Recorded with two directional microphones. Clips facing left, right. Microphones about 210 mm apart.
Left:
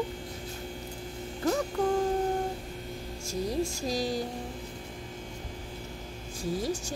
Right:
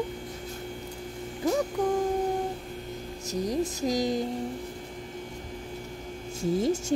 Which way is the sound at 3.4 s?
15° right (ahead or behind).